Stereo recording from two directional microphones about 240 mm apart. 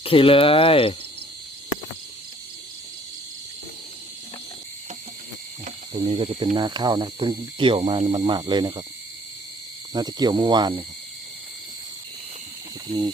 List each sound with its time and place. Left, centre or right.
0.0 s speech: left
5.6 s cricket: right
9.9 s speech: centre